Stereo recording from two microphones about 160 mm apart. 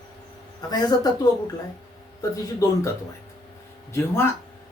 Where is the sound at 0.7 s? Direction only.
25° left (ahead or behind).